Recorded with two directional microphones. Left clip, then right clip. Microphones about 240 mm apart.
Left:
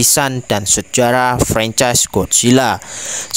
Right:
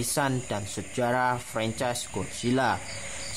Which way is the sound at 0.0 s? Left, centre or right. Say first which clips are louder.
Left 13 dB; left.